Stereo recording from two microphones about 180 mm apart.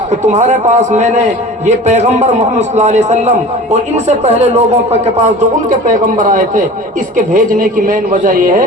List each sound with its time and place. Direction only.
0.3 s a man's voice: 40° right (ahead or behind)
6.1 s a man's voice: 45° right (ahead or behind)